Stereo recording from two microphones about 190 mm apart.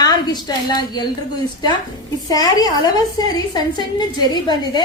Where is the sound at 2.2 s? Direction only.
20° left (ahead or behind).